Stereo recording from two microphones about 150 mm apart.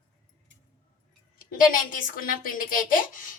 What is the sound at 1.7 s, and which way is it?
A woman's voice, 65° left (ahead or behind).